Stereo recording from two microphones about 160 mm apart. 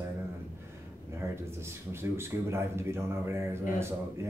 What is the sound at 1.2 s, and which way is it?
A man's voice, 15° right (ahead or behind).